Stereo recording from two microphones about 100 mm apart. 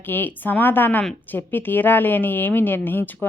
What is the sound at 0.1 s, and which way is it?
A woman's voice, 20° left (ahead or behind).